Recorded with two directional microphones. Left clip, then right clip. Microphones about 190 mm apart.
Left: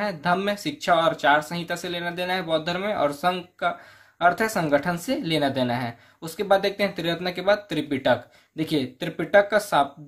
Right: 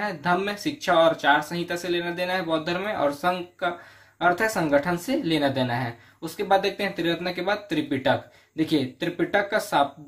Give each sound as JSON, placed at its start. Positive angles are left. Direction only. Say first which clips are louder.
{"t": 0.0, "sound": "speech", "louder": "left 1 dB", "side_deg": 40}